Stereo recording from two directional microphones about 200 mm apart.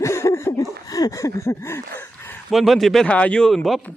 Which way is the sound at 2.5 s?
Centre (ahead or behind).